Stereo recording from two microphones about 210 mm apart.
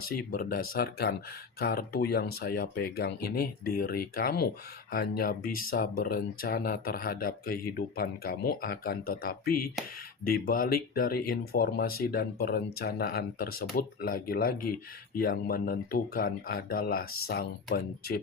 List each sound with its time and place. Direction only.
0.1 s speech: 45° left (ahead or behind)